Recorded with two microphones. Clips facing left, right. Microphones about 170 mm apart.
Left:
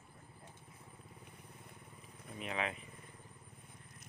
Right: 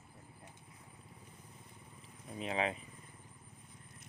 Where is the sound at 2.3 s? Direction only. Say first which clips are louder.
Right 4 dB; 30° right (ahead or behind).